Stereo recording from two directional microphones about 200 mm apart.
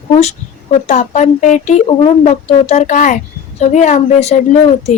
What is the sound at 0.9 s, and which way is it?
Speech, 35° left (ahead or behind).